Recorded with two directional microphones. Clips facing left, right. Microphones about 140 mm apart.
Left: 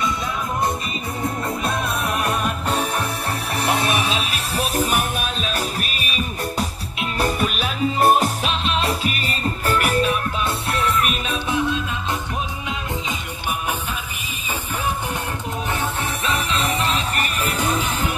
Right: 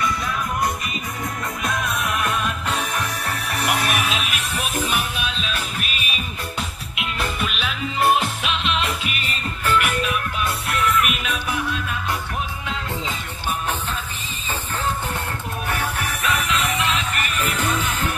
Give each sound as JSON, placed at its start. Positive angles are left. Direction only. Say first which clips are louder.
{"t": 1.2, "sound": "music", "louder": "left 4 dB", "side_deg": 30}
{"t": 15.7, "sound": "music", "louder": "even", "side_deg": 25}
{"t": 17.6, "sound": "music", "louder": "left 3 dB", "side_deg": 10}